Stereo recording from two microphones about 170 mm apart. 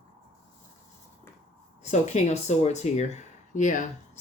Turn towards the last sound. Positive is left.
turn(degrees=45)  # may be behind; listen again after turning